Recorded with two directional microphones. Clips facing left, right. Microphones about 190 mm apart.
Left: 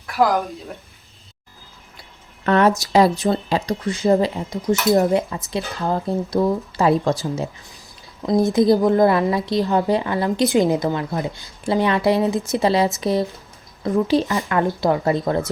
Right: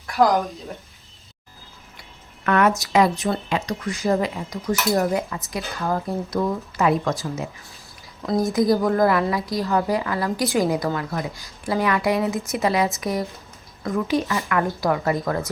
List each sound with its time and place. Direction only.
2.4 s a sound: 30° left (ahead or behind)
2.9 s a woman's voice: 35° left (ahead or behind)
8.2 s a woman's voice: 20° left (ahead or behind)